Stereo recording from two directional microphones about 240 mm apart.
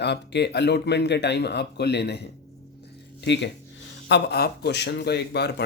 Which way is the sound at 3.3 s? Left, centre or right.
Left.